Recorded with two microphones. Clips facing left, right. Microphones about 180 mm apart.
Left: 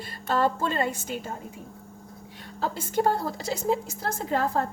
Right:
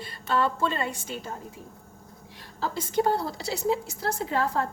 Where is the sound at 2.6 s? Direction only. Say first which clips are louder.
Even; 50° left (ahead or behind).